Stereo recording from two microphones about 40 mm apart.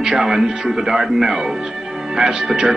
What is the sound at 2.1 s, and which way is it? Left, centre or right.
Speech, centre.